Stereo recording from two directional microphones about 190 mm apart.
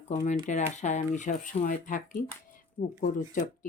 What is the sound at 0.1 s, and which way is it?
Speech, 35° left (ahead or behind).